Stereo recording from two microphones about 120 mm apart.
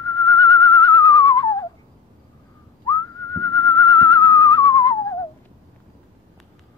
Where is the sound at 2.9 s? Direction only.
35° left (ahead or behind).